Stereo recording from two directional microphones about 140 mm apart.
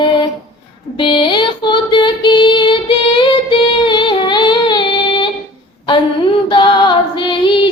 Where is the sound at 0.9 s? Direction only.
35° left (ahead or behind).